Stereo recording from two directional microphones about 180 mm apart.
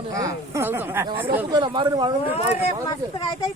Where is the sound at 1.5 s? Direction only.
25° right (ahead or behind).